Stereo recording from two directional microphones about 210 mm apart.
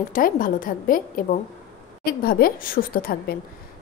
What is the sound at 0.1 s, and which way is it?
A woman's voice, 40° left (ahead or behind).